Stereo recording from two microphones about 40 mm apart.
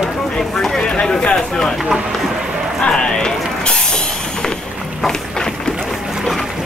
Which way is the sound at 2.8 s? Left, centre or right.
Left.